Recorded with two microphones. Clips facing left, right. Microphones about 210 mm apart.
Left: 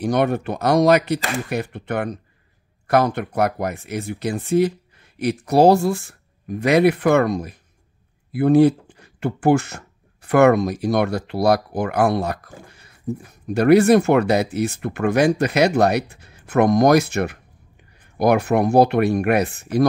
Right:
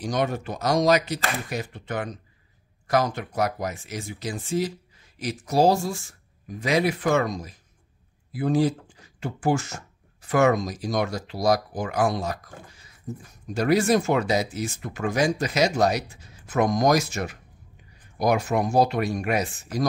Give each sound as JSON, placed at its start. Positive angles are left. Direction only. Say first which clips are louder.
{"t": 0.0, "sound": "speech", "louder": "left 7 dB", "side_deg": 60}